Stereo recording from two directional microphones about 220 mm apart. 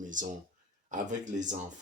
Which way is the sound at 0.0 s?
35° right (ahead or behind).